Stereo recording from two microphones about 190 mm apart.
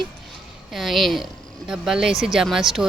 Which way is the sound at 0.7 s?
Centre (ahead or behind).